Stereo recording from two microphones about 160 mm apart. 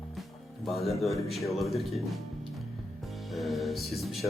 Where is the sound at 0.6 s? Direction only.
Centre (ahead or behind).